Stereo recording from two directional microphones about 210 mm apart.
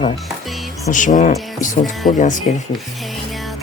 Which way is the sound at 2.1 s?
35° left (ahead or behind).